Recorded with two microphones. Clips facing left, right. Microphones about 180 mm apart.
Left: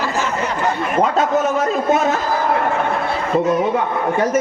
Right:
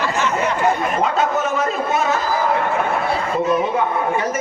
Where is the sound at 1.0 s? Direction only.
45° left (ahead or behind).